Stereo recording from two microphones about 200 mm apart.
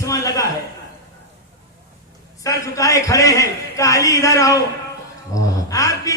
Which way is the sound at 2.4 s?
15° left (ahead or behind).